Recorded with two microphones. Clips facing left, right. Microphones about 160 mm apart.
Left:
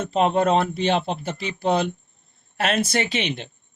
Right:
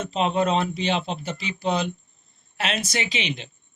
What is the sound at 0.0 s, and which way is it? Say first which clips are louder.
A man's voice: left 3 dB; 55° left (ahead or behind).